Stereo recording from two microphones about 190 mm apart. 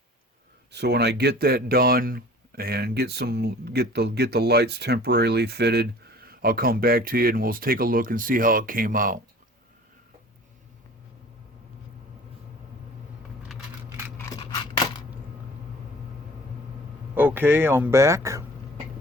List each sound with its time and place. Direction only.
0.7 s speech: 60° right (ahead or behind)
14.2 s scissors: 20° left (ahead or behind)
17.2 s speech: 10° right (ahead or behind)